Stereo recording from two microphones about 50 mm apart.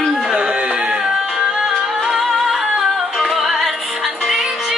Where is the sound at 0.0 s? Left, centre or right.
Centre.